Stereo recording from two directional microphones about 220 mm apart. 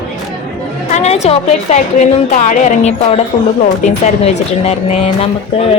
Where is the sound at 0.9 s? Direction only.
30° left (ahead or behind).